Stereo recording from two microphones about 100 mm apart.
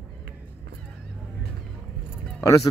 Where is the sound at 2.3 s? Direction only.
35° left (ahead or behind).